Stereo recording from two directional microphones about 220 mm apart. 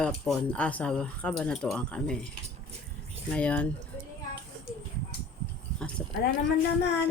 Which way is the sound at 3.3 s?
5° left (ahead or behind).